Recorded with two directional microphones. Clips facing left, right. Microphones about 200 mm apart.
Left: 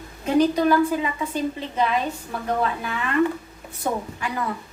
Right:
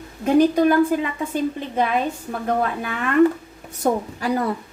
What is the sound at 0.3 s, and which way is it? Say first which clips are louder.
A woman's voice: right 3 dB; 50° right (ahead or behind).